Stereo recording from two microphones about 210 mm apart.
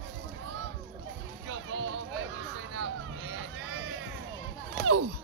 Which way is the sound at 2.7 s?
65° right (ahead or behind).